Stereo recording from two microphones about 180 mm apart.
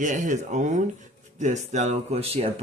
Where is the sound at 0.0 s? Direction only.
45° right (ahead or behind).